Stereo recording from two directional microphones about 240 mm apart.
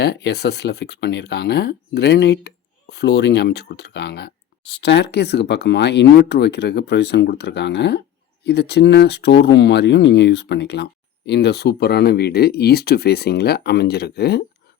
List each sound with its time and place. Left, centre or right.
0.0 s speech: left